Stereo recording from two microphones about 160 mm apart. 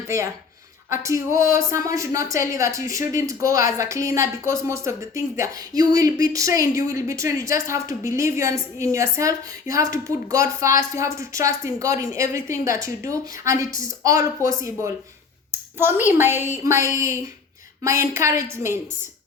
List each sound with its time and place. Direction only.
0.1 s a woman's voice: 15° right (ahead or behind)